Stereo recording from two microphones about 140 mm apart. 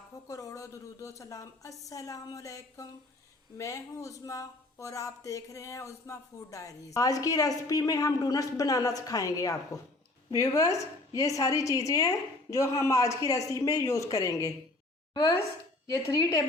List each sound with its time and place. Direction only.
0.3 s speech: 25° left (ahead or behind)
15.9 s speech: 25° left (ahead or behind)